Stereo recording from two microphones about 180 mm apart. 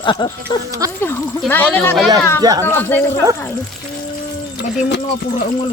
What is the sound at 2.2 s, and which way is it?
Speech, 15° left (ahead or behind).